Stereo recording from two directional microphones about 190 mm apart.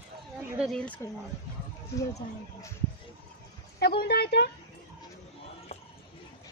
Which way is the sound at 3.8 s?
55° left (ahead or behind).